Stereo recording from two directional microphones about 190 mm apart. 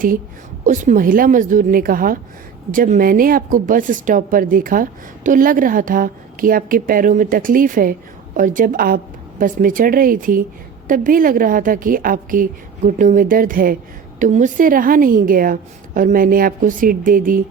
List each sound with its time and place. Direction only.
0.6 s a woman's voice: 40° right (ahead or behind)